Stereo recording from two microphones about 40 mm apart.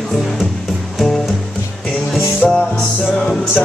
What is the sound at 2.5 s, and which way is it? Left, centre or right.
Music, left.